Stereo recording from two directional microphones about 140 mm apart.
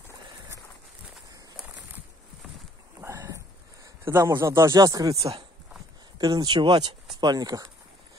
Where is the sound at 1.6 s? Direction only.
5° right (ahead or behind).